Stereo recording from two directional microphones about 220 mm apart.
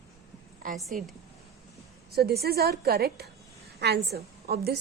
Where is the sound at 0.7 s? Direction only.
Centre (ahead or behind).